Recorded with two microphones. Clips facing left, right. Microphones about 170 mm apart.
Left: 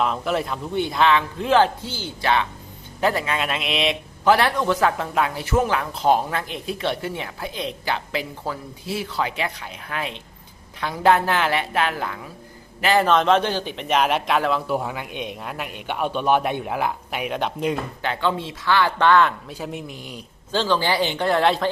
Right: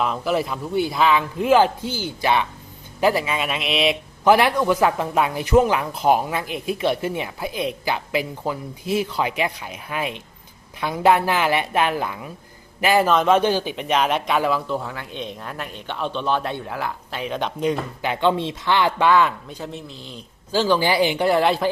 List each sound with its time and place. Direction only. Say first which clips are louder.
0.0 s a man's voice: right 1 dB; centre (ahead or behind)
4.2 s a man's voice: right 2 dB; 15° right (ahead or behind)
14.7 s speech: left 2 dB; 15° left (ahead or behind)
18.0 s a man's voice: right 5 dB; 15° right (ahead or behind)
19.5 s speech: left 2 dB; 10° left (ahead or behind)
20.5 s a man's voice: right 2 dB; 10° right (ahead or behind)